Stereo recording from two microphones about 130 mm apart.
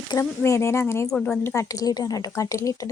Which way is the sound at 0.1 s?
25° left (ahead or behind).